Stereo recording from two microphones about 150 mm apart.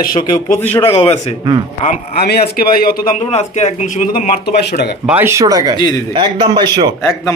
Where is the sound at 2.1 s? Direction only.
90° left.